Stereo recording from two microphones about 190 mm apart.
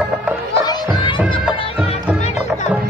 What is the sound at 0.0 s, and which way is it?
Music, 10° right (ahead or behind).